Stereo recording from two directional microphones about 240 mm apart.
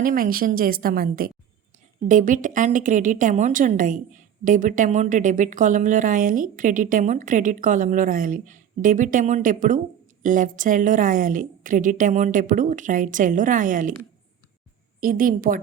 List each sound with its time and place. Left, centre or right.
0.0 s a woman's voice: right
15.0 s a woman's voice: right